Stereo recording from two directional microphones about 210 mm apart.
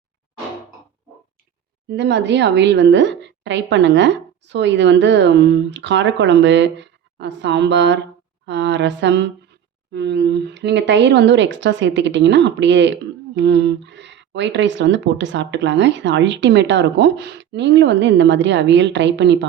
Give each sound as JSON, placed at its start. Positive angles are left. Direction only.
{"t": 1.9, "sound": "speech", "side_deg": -55}